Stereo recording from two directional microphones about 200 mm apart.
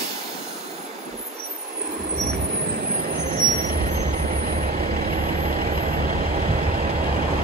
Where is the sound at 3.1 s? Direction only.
45° right (ahead or behind).